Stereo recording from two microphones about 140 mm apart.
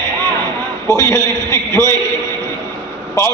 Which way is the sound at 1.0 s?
20° left (ahead or behind).